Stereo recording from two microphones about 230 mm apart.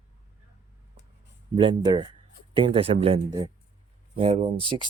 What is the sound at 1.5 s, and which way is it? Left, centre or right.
A man's voice, right.